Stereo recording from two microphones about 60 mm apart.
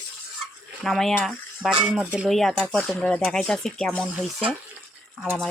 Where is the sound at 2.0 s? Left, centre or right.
Centre.